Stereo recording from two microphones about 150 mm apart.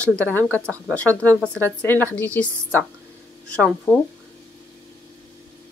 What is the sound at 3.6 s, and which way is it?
Speech, centre (ahead or behind).